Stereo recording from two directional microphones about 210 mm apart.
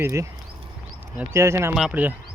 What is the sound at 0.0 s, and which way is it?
Speech, 15° right (ahead or behind).